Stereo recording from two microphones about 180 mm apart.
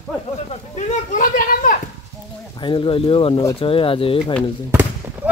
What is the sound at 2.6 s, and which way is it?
Speech, 30° left (ahead or behind).